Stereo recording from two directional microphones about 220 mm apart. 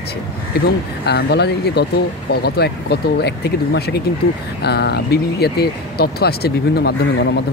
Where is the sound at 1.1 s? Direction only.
50° left (ahead or behind).